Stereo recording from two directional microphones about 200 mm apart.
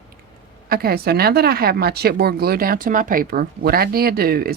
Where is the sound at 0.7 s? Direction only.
50° right (ahead or behind).